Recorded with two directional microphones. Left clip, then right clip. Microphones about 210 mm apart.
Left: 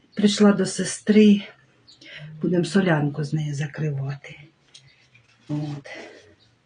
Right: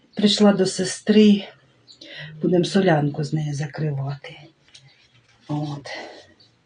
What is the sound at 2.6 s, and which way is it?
Speech, 20° left (ahead or behind).